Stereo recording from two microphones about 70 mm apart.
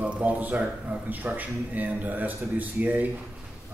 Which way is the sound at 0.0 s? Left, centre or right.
Right.